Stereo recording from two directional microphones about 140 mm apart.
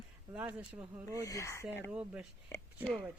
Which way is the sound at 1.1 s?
25° left (ahead or behind).